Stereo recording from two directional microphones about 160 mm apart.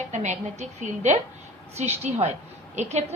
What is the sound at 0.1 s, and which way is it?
A woman's voice, 45° right (ahead or behind).